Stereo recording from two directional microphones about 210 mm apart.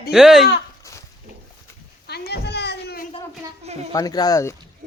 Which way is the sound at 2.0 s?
50° left (ahead or behind).